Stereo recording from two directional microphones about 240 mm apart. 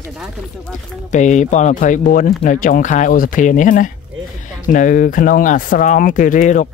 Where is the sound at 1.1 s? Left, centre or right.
Left.